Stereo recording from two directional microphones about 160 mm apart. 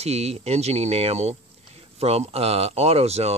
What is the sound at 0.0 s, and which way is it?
Speech, 40° right (ahead or behind).